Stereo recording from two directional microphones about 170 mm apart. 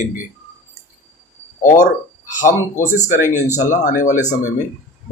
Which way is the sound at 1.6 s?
45° left (ahead or behind).